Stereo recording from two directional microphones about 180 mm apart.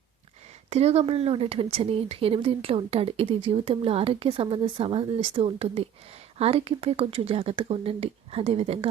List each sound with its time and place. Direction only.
0.7 s speech: 35° right (ahead or behind)